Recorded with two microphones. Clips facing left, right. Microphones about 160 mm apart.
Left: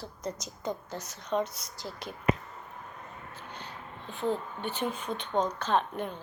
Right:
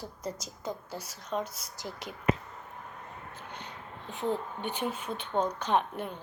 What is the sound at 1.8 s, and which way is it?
Speech, 15° right (ahead or behind).